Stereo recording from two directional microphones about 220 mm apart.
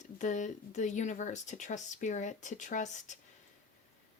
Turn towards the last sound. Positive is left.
turn(degrees=35)  # may be behind; listen again after turning